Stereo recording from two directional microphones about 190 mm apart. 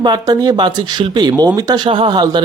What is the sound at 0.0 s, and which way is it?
Speech, 20° right (ahead or behind).